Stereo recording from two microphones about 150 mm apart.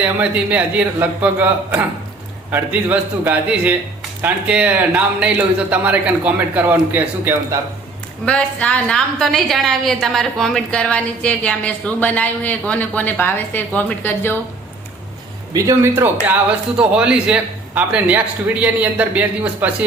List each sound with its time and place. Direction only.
0.0 s a man's voice: 10° right (ahead or behind)
8.2 s a woman's voice: 5° left (ahead or behind)
15.5 s speech: 20° right (ahead or behind)
16.7 s a man's voice: 5° right (ahead or behind)